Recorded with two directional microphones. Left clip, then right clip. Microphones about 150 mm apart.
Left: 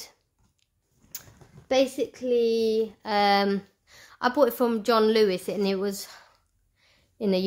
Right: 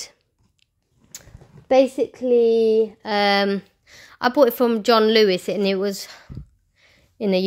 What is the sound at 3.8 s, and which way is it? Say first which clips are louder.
A woman's voice: right 5 dB; 30° right (ahead or behind).